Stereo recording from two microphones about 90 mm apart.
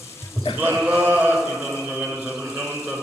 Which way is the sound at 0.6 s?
20° right (ahead or behind).